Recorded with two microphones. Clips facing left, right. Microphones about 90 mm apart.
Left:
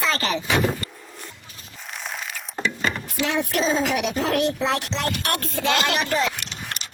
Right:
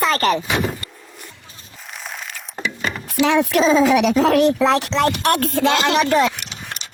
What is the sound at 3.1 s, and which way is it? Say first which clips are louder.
Speech: right 10 dB; 85° right.